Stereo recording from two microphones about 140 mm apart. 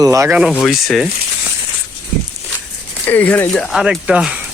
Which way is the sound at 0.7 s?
Centre (ahead or behind).